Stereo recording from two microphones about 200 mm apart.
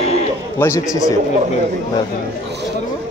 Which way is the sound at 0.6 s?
15° left (ahead or behind).